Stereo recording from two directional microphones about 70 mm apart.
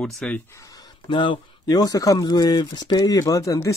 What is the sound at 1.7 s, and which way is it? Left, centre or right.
Speech, left.